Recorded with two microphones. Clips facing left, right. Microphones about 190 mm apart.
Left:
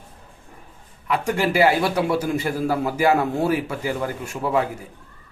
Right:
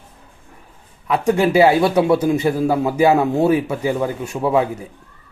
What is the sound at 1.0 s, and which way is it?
A man's voice, 25° right (ahead or behind).